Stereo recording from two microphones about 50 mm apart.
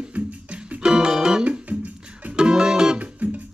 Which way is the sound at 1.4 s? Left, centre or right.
Right.